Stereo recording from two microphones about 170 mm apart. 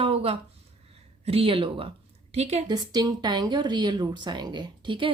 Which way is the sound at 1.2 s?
35° right (ahead or behind).